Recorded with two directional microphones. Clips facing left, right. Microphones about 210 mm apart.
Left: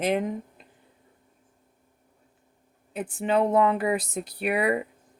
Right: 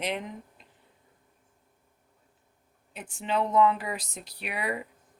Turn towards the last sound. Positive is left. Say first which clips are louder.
# left 9 dB
turn(degrees=55)  # may be behind; listen again after turning